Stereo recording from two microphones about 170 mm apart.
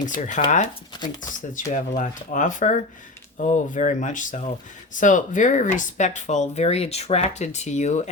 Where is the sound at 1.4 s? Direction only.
50° left (ahead or behind).